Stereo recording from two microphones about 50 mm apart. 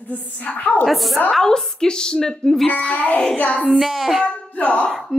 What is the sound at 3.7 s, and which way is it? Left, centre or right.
Music, centre.